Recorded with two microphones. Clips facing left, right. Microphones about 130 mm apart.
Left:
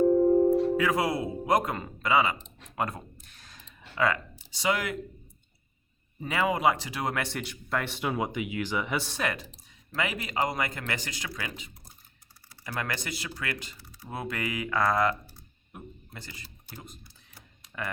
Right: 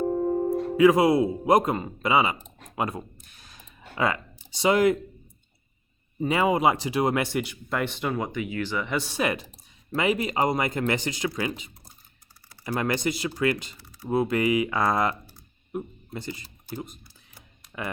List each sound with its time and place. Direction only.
0.8 s speech: 15° right (ahead or behind)
2.7 s a sound: 10° right (ahead or behind)
3.9 s speech: 20° right (ahead or behind)
6.1 s speech: 20° right (ahead or behind); by 9.0 s 10° left (ahead or behind)
9.0 s speech: 10° right (ahead or behind)